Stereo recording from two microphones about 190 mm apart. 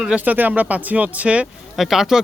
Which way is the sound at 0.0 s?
5° right (ahead or behind).